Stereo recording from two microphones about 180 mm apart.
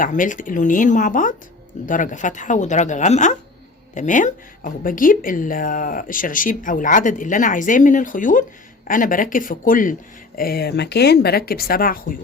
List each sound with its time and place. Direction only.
0.0 s speech: 45° left (ahead or behind)